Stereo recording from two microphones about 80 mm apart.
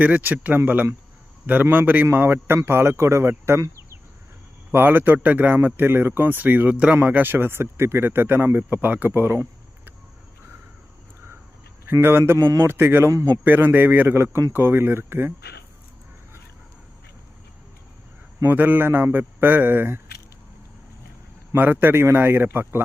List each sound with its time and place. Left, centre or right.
0.0 s speech: centre
4.7 s speech: right
11.9 s speech: right
12.4 s a man's voice: right
12.6 s speech: right
13.1 s a man's voice: right
13.4 s speech: right
18.4 s speech: right
21.5 s speech: right